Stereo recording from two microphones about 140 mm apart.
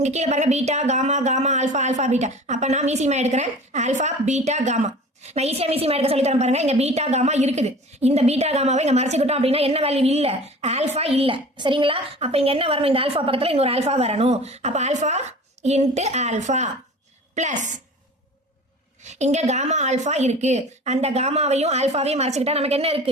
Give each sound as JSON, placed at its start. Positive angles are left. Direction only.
{"t": 0.0, "sound": "a woman's voice", "side_deg": -55}
{"t": 19.0, "sound": "a woman's voice", "side_deg": -55}